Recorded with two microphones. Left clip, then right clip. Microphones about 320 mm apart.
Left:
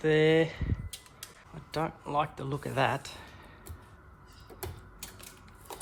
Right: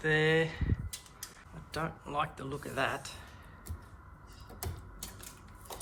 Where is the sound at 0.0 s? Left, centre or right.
Centre.